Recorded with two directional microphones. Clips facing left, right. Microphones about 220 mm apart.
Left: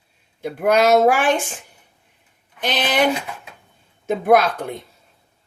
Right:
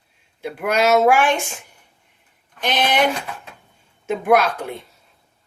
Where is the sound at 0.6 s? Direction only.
45° left (ahead or behind).